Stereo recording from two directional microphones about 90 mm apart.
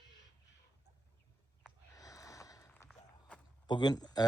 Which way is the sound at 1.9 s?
40° left (ahead or behind).